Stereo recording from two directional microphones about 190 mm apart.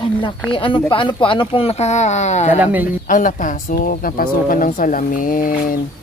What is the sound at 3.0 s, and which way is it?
A woman's voice, 45° left (ahead or behind).